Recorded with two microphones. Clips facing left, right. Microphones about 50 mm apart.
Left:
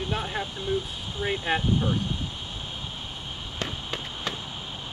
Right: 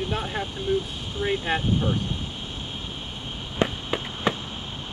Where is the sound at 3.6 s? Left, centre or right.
Centre.